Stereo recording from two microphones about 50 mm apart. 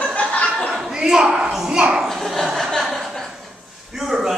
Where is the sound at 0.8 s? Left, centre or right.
Centre.